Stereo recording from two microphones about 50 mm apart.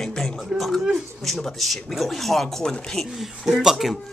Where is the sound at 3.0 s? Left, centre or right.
Centre.